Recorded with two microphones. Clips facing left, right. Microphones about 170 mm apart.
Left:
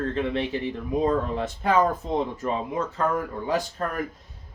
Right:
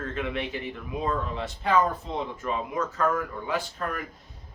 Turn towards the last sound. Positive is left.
turn(degrees=40)  # may be behind; listen again after turning